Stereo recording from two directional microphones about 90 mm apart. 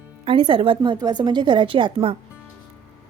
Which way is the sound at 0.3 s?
80° right.